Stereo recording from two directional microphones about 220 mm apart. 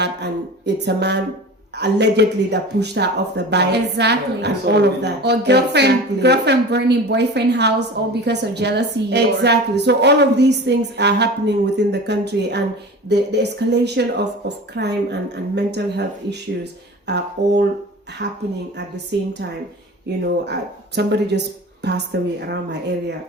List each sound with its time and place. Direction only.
0.0 s a sound: 50° right (ahead or behind)
1.8 s speech: 50° right (ahead or behind)
20.4 s speech: 50° right (ahead or behind)